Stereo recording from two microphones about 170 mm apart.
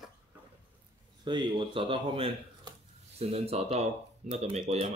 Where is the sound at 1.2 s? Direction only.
25° right (ahead or behind).